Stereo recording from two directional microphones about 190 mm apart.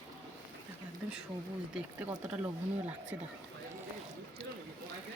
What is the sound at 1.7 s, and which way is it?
Speech, 5° right (ahead or behind).